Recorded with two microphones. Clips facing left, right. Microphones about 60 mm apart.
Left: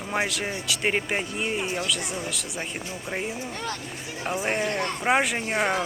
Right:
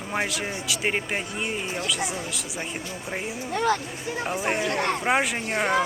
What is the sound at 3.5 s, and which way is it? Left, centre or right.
Speech, right.